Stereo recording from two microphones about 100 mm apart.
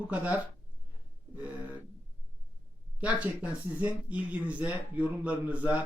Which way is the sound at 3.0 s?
15° right (ahead or behind).